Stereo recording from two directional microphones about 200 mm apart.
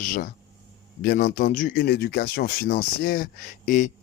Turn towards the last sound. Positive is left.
turn(degrees=40)  # may be behind; listen again after turning